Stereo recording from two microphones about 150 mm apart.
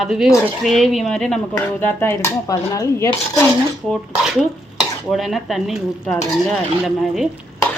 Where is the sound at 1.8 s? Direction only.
15° left (ahead or behind).